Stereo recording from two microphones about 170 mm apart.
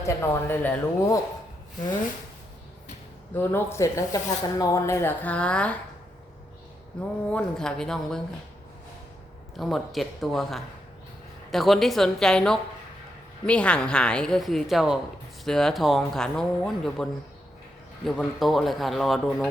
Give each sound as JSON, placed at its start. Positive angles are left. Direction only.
{"t": 0.0, "sound": "speech", "side_deg": 15}
{"t": 3.3, "sound": "speech", "side_deg": 15}
{"t": 7.3, "sound": "speech", "side_deg": 5}
{"t": 9.6, "sound": "speech", "side_deg": 0}